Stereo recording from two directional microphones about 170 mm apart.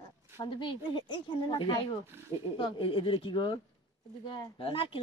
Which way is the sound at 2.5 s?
30° left (ahead or behind).